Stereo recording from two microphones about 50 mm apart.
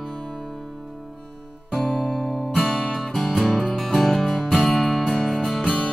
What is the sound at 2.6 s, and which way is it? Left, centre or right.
Music, centre.